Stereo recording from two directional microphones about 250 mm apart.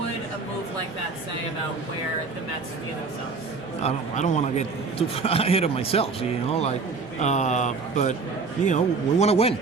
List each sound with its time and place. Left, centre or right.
3.8 s a man's voice: left